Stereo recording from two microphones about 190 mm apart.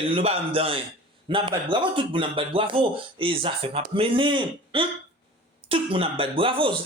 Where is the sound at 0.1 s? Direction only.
30° right (ahead or behind).